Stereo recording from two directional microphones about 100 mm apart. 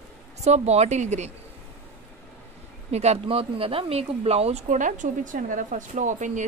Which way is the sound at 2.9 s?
90° right.